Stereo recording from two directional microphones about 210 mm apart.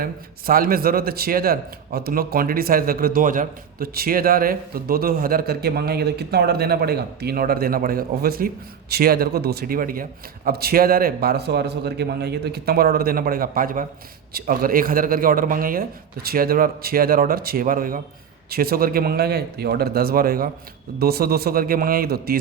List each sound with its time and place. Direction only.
0.0 s a man's voice: 45° right (ahead or behind)